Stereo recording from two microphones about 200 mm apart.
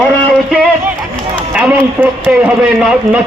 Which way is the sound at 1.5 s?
5° right (ahead or behind).